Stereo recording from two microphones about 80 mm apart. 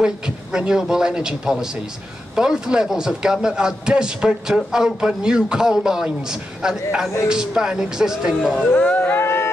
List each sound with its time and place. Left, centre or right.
0.0 s a man's voice: centre
8.7 s speech: centre
9.2 s a sound: left